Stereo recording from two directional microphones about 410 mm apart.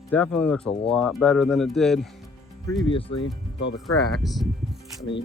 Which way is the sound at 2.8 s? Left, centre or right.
Centre.